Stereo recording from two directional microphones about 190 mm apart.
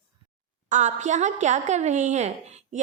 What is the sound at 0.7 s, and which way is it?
A woman's voice, 40° right (ahead or behind).